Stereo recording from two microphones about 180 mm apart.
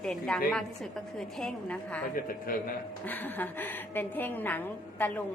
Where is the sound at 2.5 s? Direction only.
50° left (ahead or behind).